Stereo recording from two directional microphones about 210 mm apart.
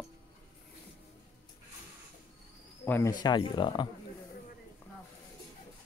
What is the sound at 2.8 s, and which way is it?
Speech, 10° left (ahead or behind).